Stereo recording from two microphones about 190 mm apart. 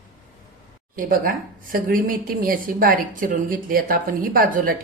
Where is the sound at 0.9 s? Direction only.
45° right (ahead or behind).